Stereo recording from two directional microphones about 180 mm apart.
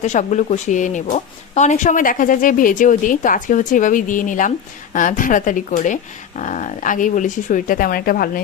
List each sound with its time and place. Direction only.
0.0 s speech: 40° left (ahead or behind)